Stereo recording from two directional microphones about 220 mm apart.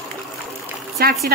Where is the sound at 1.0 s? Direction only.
45° right (ahead or behind).